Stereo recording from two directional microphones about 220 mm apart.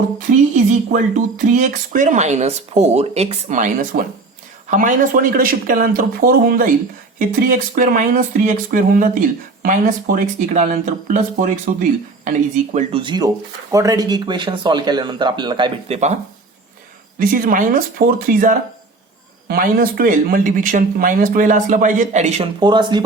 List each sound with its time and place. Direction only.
0.5 s a sound: 40° right (ahead or behind)
1.5 s speech: 35° right (ahead or behind)
17.2 s speech: 40° right (ahead or behind); by 23.0 s 20° right (ahead or behind)